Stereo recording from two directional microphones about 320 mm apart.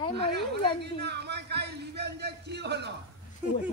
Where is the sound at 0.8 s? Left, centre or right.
Right.